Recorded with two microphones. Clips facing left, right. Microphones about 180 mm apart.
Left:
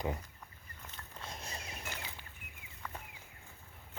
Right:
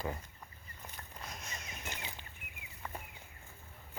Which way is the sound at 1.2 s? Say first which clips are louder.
Left 2 dB; 30° left (ahead or behind).